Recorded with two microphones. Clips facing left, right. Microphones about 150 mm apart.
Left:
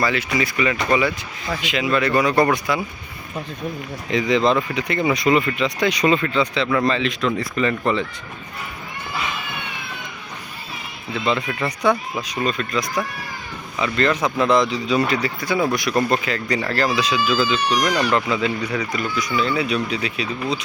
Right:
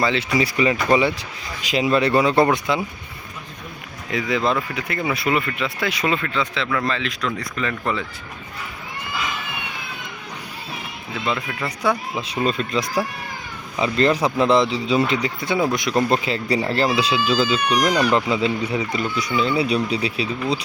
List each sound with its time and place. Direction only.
0.0 s a man's voice: 25° right (ahead or behind)
4.1 s speech: 5° right (ahead or behind)
11.1 s speech: centre (ahead or behind)
12.5 s a man's voice: 30° right (ahead or behind)